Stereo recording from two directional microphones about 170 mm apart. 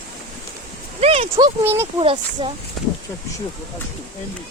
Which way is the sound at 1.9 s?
30° right (ahead or behind).